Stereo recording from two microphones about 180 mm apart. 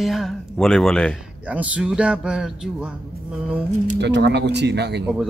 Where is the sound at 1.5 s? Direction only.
5° right (ahead or behind).